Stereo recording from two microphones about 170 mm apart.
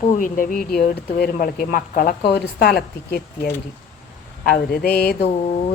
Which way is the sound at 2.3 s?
70° left (ahead or behind).